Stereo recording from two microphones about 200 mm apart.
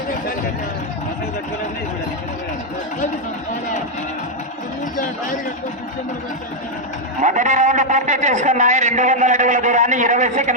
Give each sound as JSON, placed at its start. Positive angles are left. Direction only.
{"t": 7.2, "sound": "a man's voice", "side_deg": -40}